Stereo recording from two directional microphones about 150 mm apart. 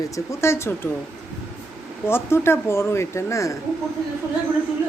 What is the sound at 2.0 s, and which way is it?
Speech, 15° left (ahead or behind).